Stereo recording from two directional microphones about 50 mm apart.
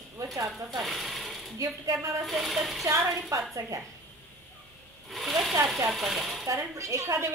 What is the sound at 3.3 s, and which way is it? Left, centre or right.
Speech, right.